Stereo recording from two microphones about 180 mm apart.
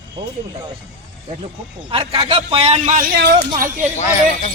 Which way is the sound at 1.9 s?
30° right (ahead or behind).